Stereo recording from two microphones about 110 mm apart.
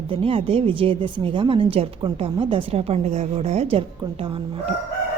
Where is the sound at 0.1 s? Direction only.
60° right (ahead or behind).